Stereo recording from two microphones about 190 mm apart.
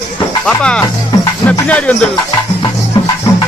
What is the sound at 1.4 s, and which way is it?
Music, 5° left (ahead or behind).